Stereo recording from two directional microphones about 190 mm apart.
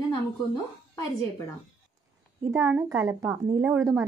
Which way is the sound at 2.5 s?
10° right (ahead or behind).